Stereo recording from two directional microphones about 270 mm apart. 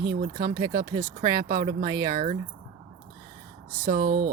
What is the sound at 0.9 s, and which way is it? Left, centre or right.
Speech, centre.